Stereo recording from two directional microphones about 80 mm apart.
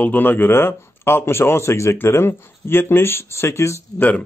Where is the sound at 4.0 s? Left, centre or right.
Centre.